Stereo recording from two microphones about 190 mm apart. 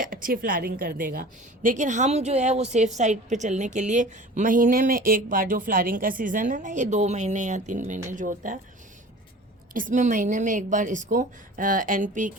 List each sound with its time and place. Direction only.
0.0 s a woman's voice: 45° right (ahead or behind)
9.7 s speech: 45° right (ahead or behind)